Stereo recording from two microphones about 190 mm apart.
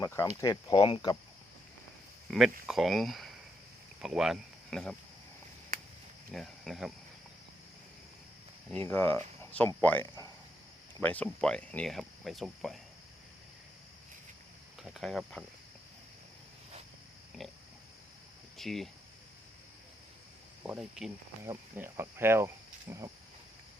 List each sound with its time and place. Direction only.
0.0 s a sound: 15° left (ahead or behind)
0.4 s speech: 25° left (ahead or behind)
2.3 s speech: 5° left (ahead or behind)
6.3 s speech: centre (ahead or behind)
8.7 s speech: 10° left (ahead or behind)
14.8 s speech: centre (ahead or behind)
18.5 s speech: centre (ahead or behind)
20.7 s speech: centre (ahead or behind)
21.4 s speech: 15° right (ahead or behind)